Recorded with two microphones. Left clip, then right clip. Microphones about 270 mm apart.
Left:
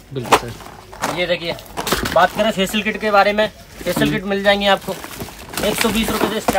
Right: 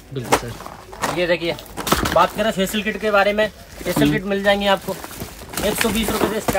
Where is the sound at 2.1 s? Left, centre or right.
Centre.